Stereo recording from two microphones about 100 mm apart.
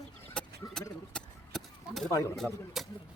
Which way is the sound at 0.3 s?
10° left (ahead or behind).